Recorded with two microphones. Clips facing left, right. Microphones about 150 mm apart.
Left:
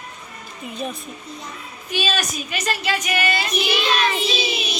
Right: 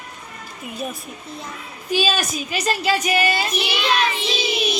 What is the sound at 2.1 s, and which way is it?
A woman's voice, 35° right (ahead or behind).